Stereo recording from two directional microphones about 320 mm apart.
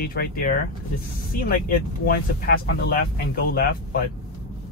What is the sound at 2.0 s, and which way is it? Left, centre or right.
Speech, left.